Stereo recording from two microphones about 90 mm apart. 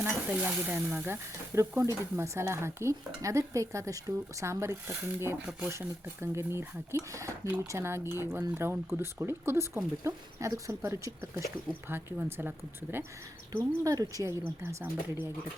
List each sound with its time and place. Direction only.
0.0 s speech: 20° right (ahead or behind)
13.6 s speech: 40° right (ahead or behind)
14.4 s speech: 30° right (ahead or behind)